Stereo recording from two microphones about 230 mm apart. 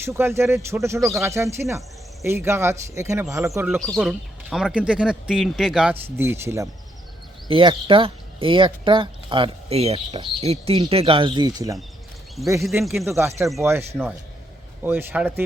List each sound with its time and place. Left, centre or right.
0.0 s speech: centre
3.8 s speech: centre
7.5 s speech: right
12.8 s speech: centre
13.1 s speech: centre